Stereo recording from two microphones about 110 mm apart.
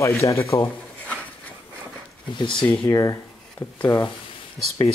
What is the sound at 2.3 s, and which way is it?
Speech, 45° left (ahead or behind).